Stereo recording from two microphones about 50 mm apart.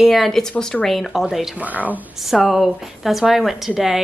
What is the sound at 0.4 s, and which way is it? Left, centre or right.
A woman's voice, centre.